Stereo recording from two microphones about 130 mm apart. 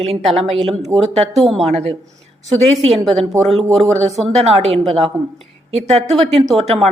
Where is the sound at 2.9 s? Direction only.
Centre (ahead or behind).